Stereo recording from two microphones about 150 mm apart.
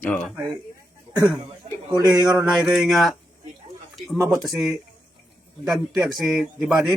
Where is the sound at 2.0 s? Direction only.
25° right (ahead or behind).